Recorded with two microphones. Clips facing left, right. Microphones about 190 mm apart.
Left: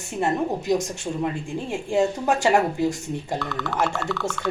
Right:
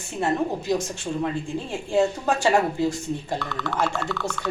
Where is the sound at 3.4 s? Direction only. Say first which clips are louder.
Left 1 dB; centre (ahead or behind).